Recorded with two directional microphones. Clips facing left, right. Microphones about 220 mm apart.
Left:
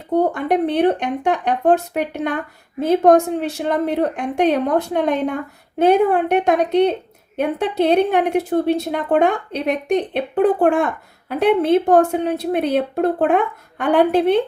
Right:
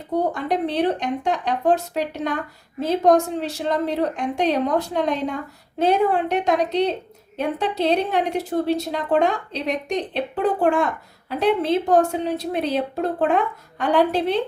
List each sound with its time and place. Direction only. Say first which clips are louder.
0.3 s a woman's voice: left 4 dB; 55° left (ahead or behind)